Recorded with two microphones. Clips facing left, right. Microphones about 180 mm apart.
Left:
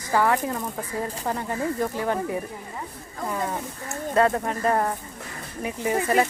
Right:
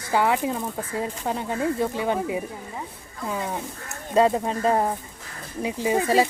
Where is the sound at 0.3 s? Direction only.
15° right (ahead or behind).